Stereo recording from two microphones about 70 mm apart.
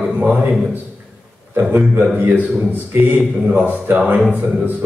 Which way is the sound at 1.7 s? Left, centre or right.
Right.